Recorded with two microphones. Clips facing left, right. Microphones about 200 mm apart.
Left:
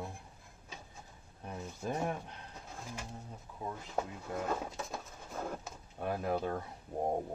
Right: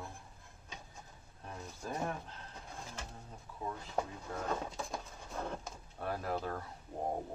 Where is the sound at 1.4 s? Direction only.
15° left (ahead or behind).